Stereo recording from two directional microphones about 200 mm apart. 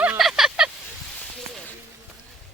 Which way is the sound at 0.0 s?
5° right (ahead or behind).